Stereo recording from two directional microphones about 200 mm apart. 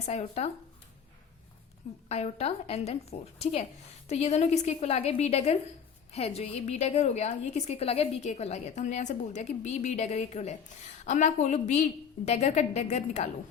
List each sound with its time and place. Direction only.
0.0 s a woman's voice: 30° left (ahead or behind)
2.0 s a woman's voice: 30° left (ahead or behind)